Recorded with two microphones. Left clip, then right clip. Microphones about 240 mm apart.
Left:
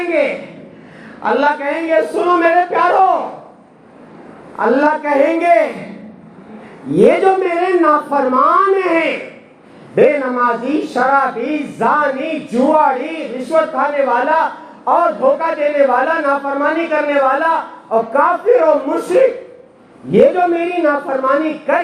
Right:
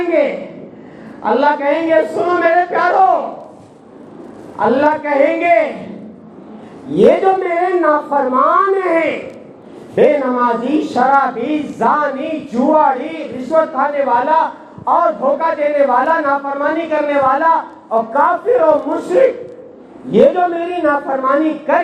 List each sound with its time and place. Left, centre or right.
0.1 s a man's voice: left
1.2 s music: left
4.5 s a man's voice: left
6.9 s a man's voice: left